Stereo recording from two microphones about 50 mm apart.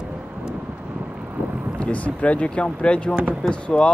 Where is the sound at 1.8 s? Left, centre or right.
Left.